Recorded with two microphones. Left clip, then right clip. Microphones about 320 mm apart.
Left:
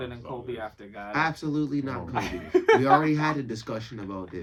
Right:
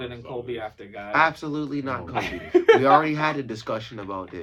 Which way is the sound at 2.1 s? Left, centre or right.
Centre.